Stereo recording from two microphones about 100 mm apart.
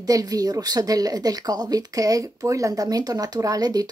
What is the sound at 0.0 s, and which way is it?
Speech, 35° right (ahead or behind).